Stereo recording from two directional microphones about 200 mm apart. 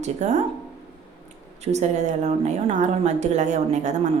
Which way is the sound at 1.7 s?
35° right (ahead or behind).